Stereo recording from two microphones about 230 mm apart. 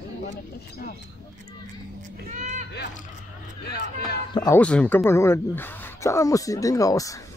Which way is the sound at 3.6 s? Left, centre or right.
Left.